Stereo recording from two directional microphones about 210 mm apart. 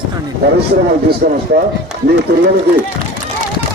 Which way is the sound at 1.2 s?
45° right (ahead or behind).